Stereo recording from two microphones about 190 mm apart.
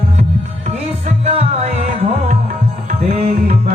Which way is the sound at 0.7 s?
30° right (ahead or behind).